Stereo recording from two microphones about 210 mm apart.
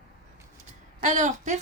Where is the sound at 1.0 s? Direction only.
35° right (ahead or behind).